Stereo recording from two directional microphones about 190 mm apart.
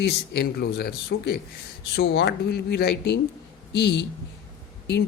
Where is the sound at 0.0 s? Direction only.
55° left (ahead or behind).